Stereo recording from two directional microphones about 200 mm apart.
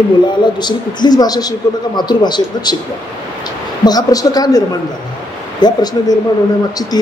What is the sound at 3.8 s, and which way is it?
A man's voice, 20° left (ahead or behind).